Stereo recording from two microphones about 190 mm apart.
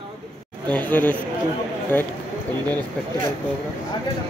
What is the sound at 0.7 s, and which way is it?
Speech, 10° left (ahead or behind).